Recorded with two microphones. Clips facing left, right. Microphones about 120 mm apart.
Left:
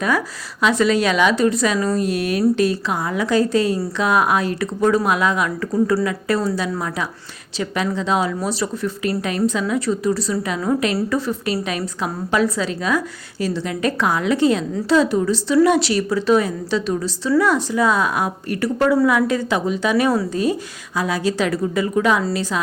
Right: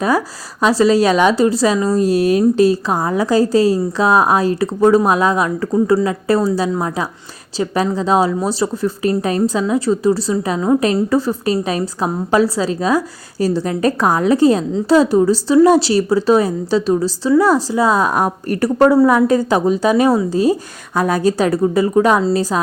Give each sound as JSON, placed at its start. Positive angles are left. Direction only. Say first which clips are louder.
{"t": 0.6, "sound": "a woman's voice", "louder": "right 4 dB", "side_deg": -35}
{"t": 5.7, "sound": "a woman's voice", "louder": "right 4 dB", "side_deg": -25}
{"t": 20.9, "sound": "a woman's voice", "louder": "right 5 dB", "side_deg": -50}